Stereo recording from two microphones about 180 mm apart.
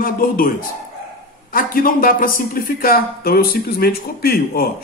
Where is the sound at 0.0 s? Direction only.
50° left (ahead or behind).